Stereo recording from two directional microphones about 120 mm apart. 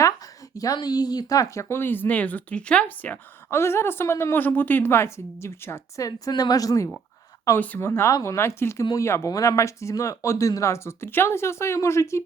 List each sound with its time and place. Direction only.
0.5 s speech: 30° left (ahead or behind)
7.6 s speech: 15° left (ahead or behind)